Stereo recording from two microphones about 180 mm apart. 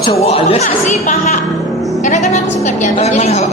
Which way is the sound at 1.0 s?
45° left (ahead or behind).